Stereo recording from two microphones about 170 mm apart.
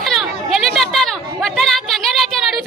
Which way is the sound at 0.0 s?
Centre (ahead or behind).